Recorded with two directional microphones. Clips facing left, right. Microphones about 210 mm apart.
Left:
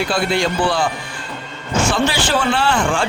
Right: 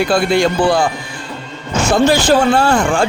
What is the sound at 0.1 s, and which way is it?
Speech, 45° right (ahead or behind).